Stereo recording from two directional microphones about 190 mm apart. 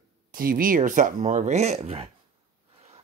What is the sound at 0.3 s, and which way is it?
Speech, 45° right (ahead or behind).